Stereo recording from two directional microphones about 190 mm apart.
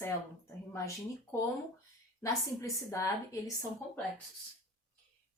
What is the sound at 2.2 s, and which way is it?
Speech, 15° left (ahead or behind).